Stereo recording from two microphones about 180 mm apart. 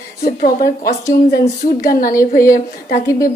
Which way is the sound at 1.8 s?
50° left (ahead or behind).